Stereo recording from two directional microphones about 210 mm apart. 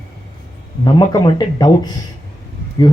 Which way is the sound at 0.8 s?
20° left (ahead or behind).